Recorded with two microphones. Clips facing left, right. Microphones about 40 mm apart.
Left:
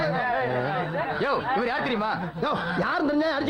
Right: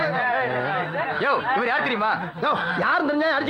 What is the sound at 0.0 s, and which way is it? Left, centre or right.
Speech, right.